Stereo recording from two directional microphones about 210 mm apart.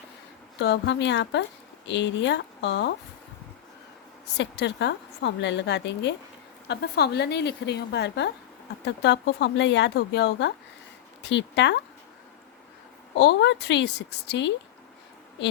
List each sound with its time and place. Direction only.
0.6 s a woman's voice: 55° left (ahead or behind)
4.4 s a woman's voice: 55° left (ahead or behind)
13.1 s a woman's voice: 55° left (ahead or behind)